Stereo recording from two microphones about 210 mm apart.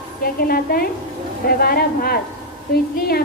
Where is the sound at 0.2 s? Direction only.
45° left (ahead or behind).